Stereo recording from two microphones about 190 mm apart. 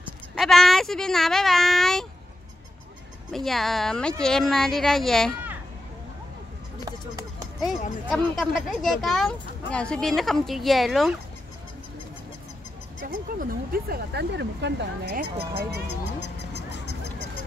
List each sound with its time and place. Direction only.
0.4 s speech: centre (ahead or behind)
3.3 s speech: centre (ahead or behind)
6.8 s a sound: 20° right (ahead or behind)
8.1 s speech: centre (ahead or behind)
13.0 s speech: 45° right (ahead or behind)
15.9 s a sound: 65° left (ahead or behind)